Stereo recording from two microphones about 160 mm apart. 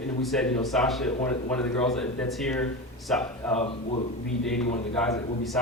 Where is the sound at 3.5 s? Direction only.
40° left (ahead or behind).